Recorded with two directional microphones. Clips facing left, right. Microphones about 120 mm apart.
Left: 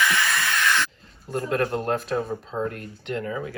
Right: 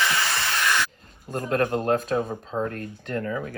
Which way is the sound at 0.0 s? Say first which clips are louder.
Left 2 dB; 30° right (ahead or behind).